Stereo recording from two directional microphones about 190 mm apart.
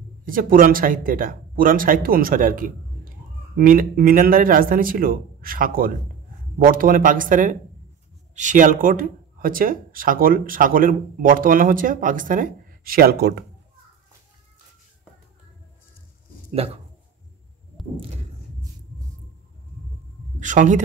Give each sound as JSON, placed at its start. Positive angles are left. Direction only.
{"t": 0.2, "sound": "speech", "side_deg": -45}
{"t": 20.3, "sound": "a man's voice", "side_deg": -40}